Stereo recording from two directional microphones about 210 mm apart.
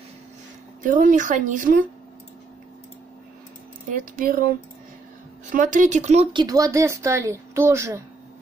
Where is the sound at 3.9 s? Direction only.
40° right (ahead or behind).